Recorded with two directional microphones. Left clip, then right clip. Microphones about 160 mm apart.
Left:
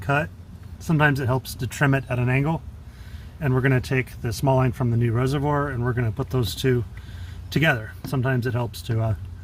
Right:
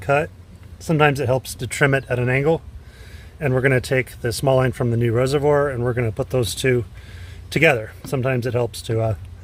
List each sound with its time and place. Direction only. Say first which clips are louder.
0.0 s speech: right 5 dB; 30° right (ahead or behind)